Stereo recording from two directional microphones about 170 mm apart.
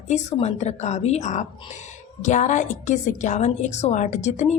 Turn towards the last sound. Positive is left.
turn(degrees=45)  # may be behind; listen again after turning